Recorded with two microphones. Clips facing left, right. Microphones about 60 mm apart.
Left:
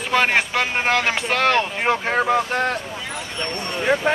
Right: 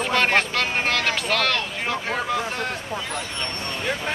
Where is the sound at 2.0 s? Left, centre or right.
Left.